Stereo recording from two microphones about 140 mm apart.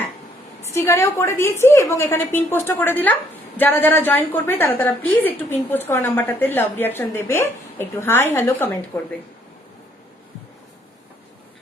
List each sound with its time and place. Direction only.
0.6 s a woman's voice: 20° left (ahead or behind)